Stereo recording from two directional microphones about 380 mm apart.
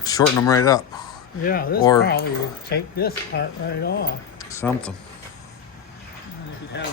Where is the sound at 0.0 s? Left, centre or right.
Centre.